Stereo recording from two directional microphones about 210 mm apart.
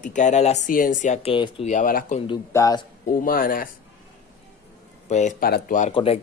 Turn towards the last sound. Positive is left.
turn(degrees=30)  # may be behind; listen again after turning